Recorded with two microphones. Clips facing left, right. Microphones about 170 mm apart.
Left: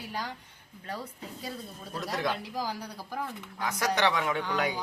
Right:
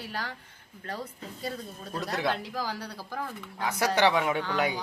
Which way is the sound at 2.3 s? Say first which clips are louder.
Right 2 dB; 15° left (ahead or behind).